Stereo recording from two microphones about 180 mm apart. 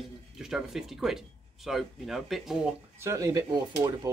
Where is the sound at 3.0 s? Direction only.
20° right (ahead or behind).